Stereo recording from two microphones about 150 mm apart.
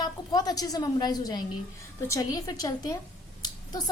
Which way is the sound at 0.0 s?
25° left (ahead or behind).